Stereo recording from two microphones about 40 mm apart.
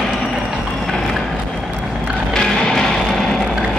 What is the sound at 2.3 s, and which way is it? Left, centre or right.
Music, centre.